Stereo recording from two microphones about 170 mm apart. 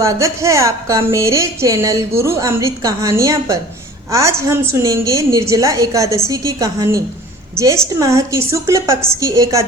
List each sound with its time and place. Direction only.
0.0 s a woman's voice: 15° right (ahead or behind)